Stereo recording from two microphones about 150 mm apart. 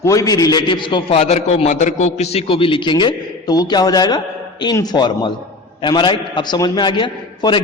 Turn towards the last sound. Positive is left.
turn(degrees=30)  # may be behind; listen again after turning